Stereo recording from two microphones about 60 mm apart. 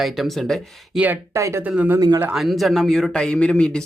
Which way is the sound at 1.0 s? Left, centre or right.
Centre.